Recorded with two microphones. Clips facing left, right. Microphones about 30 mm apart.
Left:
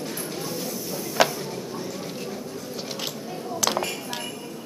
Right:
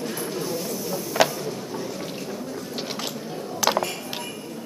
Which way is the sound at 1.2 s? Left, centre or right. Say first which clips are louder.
Even; centre.